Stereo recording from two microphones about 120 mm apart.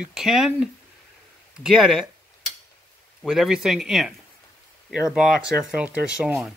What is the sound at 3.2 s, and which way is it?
Speech, centre (ahead or behind).